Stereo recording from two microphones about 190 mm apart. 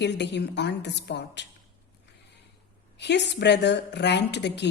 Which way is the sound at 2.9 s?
65° left (ahead or behind).